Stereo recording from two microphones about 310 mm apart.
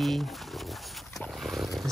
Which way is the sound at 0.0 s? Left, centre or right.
Centre.